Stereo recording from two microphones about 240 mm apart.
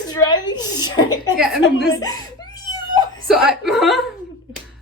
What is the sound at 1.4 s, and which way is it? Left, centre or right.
Speech, centre.